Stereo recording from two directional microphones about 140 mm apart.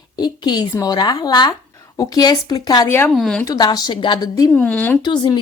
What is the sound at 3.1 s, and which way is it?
Speech, centre (ahead or behind).